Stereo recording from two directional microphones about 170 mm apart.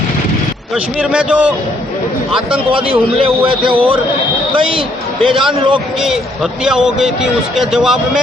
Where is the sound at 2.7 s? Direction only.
30° right (ahead or behind).